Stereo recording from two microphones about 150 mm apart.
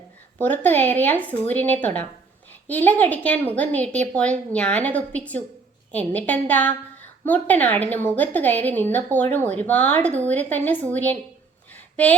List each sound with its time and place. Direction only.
0.3 s a woman's voice: 10° left (ahead or behind)